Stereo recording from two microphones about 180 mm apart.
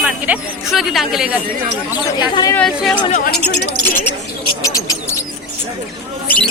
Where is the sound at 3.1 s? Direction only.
55° left (ahead or behind).